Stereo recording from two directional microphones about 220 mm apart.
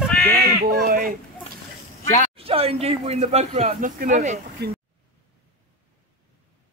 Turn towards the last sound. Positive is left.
turn(degrees=-50)  # may be behind; listen again after turning